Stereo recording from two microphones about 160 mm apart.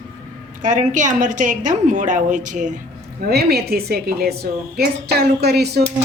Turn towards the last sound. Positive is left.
turn(degrees=-90)